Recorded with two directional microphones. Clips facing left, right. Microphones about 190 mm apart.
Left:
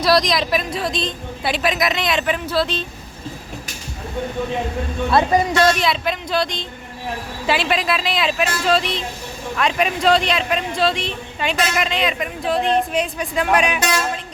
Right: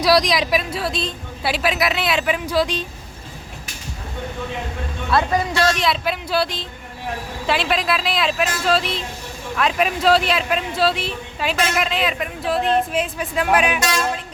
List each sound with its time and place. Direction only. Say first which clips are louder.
0.0 s a woman's voice: even; 10° right (ahead or behind)
5.1 s speech: left 3 dB; 20° left (ahead or behind)
5.7 s a woman's voice: left 1 dB; centre (ahead or behind)